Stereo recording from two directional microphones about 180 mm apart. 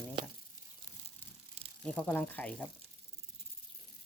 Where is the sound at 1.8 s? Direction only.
5° left (ahead or behind).